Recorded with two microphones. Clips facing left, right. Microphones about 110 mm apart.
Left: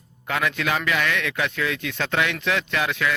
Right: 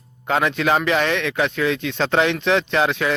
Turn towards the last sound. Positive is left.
turn(degrees=-25)  # may be behind; listen again after turning